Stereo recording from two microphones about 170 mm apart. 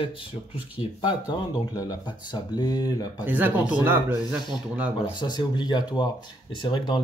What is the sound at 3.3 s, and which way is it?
Speech, 10° right (ahead or behind).